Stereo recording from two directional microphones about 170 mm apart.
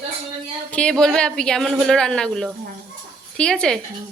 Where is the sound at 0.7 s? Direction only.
5° left (ahead or behind).